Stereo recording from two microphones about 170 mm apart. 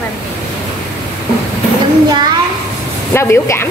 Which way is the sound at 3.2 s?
15° left (ahead or behind).